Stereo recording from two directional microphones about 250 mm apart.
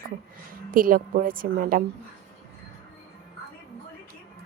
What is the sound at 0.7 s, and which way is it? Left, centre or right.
Speech, right.